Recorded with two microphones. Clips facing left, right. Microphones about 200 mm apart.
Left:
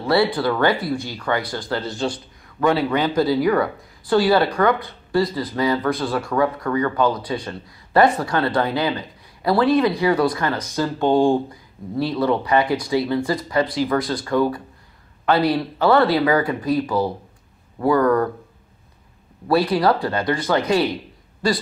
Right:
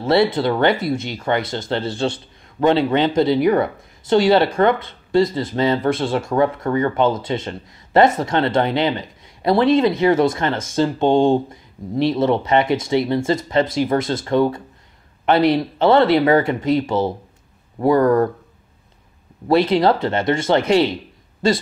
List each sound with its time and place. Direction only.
0.0 s speech: 20° right (ahead or behind)
19.4 s speech: 25° right (ahead or behind)